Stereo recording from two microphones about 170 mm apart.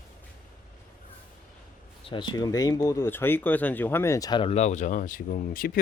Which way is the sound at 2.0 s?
30° left (ahead or behind).